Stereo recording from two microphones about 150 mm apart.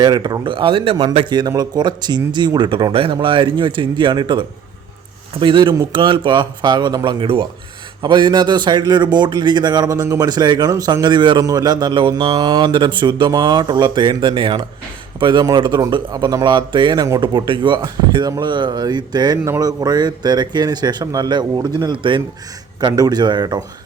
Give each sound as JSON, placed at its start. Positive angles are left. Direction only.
{"t": 0.0, "sound": "a man's voice", "side_deg": -25}